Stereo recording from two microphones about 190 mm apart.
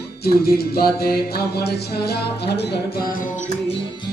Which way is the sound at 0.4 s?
55° left (ahead or behind).